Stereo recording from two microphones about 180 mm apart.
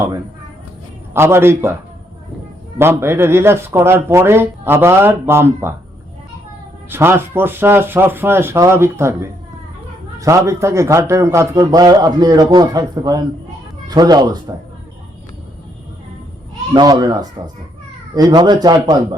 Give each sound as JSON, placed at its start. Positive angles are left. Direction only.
{"t": 1.1, "sound": "speech", "side_deg": -15}
{"t": 2.7, "sound": "speech", "side_deg": -15}
{"t": 6.9, "sound": "a man's voice", "side_deg": -10}
{"t": 16.7, "sound": "a man's voice", "side_deg": -20}